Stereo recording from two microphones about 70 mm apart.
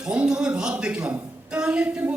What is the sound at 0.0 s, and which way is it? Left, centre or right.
A man's voice, centre.